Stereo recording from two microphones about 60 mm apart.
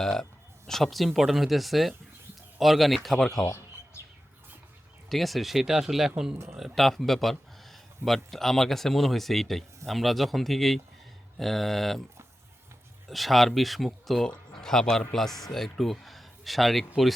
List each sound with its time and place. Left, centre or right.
0.0 s speech: centre
5.0 s speech: centre
6.7 s speech: centre
13.1 s speech: centre